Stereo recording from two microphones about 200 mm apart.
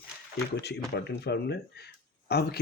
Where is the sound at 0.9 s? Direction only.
55° left (ahead or behind).